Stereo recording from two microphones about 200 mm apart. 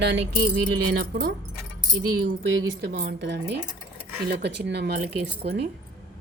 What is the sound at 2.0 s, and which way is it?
Speech, 75° right (ahead or behind).